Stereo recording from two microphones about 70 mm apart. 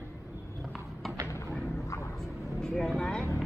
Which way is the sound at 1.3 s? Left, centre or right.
Left.